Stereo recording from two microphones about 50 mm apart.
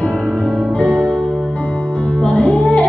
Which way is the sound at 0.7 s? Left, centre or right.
Left.